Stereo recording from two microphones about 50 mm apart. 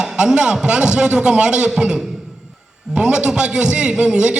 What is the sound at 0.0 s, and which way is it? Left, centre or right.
A man's voice, centre.